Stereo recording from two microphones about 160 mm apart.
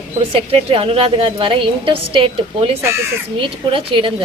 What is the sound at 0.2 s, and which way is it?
A woman's voice, 35° right (ahead or behind).